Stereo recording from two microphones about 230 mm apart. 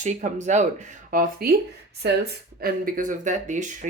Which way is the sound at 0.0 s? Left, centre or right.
Right.